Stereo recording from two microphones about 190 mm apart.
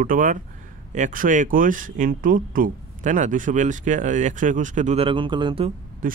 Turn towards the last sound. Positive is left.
turn(degrees=-45)  # may be behind; listen again after turning